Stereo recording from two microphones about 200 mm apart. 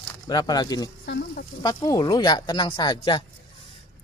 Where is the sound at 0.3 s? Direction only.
20° left (ahead or behind).